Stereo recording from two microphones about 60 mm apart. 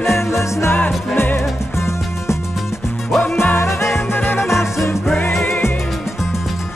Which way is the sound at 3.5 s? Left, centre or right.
Left.